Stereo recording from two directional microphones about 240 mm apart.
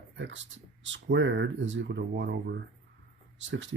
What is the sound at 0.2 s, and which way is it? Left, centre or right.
Speech, right.